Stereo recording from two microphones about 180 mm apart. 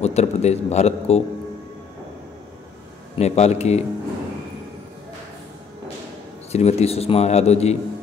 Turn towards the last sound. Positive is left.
turn(degrees=35)  # may be behind; listen again after turning